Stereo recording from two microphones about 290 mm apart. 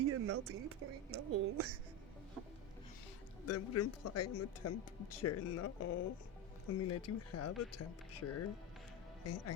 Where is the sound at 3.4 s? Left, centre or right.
Left.